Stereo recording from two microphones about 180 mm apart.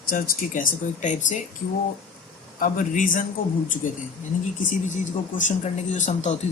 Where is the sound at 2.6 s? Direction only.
50° left (ahead or behind).